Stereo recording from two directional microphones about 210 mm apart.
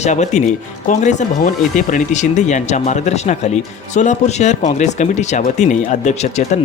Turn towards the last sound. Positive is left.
turn(degrees=35)  # may be behind; listen again after turning